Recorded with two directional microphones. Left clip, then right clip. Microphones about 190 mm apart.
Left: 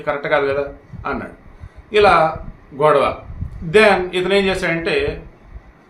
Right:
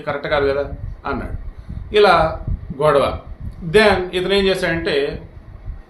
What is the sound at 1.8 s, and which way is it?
A man's voice, 5° left (ahead or behind).